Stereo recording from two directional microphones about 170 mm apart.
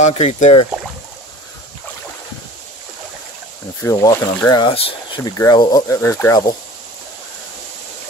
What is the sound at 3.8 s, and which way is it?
Speech, 20° left (ahead or behind).